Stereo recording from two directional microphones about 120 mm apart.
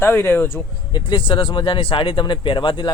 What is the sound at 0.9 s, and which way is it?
A man's voice, 45° left (ahead or behind).